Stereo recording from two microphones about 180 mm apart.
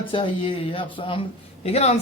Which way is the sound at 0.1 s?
30° left (ahead or behind).